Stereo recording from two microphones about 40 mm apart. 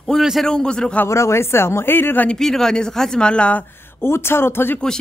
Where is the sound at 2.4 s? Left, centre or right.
Centre.